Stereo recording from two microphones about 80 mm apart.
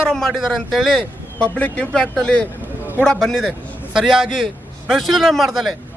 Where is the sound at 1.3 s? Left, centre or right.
Centre.